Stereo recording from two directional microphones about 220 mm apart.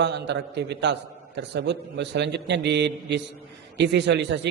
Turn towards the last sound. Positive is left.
turn(degrees=-50)  # may be behind; listen again after turning